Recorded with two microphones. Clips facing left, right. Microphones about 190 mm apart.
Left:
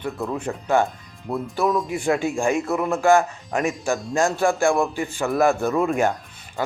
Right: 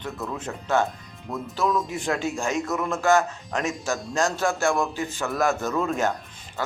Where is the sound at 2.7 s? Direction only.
15° left (ahead or behind).